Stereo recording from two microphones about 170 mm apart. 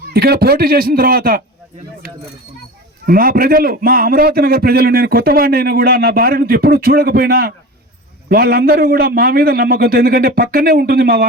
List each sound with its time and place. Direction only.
0.1 s a man's voice: 65° right (ahead or behind)
3.1 s a man's voice: 55° right (ahead or behind)